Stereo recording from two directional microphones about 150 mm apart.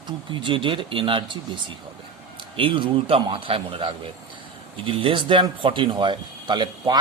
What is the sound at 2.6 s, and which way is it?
A man's voice, 35° right (ahead or behind).